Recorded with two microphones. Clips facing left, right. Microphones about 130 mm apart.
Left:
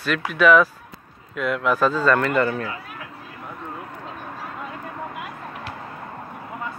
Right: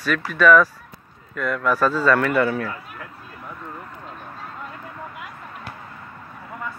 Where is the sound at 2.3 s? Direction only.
10° right (ahead or behind).